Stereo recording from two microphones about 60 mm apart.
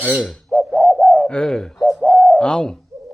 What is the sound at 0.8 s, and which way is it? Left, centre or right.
Bird, centre.